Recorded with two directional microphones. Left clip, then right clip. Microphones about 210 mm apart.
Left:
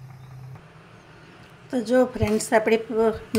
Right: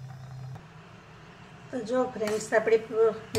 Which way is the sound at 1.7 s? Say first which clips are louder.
Left 8 dB; 45° left (ahead or behind).